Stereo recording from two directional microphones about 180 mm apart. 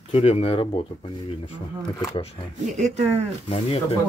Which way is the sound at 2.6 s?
40° right (ahead or behind).